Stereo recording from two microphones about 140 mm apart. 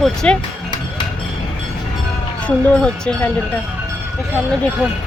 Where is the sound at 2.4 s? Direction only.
5° left (ahead or behind).